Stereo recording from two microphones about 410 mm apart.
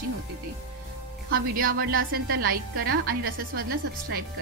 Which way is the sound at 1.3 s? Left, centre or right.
Right.